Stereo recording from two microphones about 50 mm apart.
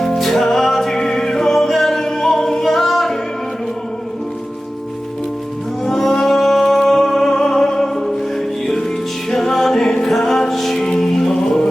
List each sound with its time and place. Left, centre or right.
0.0 s music: centre
5.8 s music: centre